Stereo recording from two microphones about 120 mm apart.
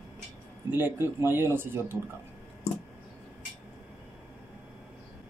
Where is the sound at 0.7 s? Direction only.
15° right (ahead or behind).